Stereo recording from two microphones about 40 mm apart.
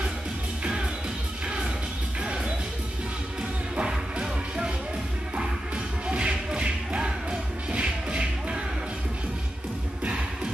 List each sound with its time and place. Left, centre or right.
2.2 s music: right
3.7 s music: centre
6.0 s music: right